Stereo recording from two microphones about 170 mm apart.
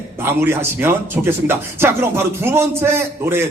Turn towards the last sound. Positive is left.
turn(degrees=-15)  # may be behind; listen again after turning